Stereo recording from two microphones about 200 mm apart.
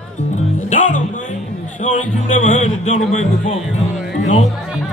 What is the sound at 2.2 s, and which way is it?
Speech, 35° left (ahead or behind).